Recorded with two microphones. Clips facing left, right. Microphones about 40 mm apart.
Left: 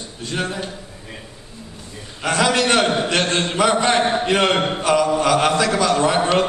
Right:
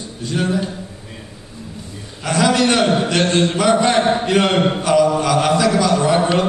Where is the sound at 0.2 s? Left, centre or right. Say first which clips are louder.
Right 3 dB; left.